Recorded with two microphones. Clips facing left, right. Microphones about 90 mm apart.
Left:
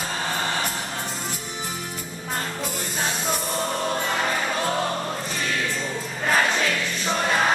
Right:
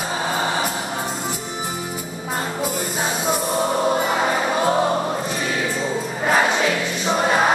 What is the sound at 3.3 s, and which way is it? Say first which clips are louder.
Music: right 6 dB; 10° right (ahead or behind).